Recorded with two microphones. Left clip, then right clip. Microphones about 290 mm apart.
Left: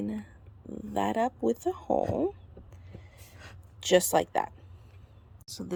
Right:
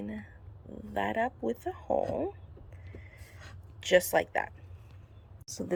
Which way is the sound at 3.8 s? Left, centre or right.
Centre.